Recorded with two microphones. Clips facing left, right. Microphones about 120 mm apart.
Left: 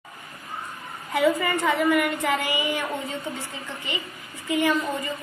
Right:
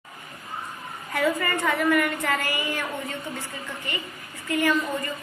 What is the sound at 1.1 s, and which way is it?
A woman's voice, 15° left (ahead or behind).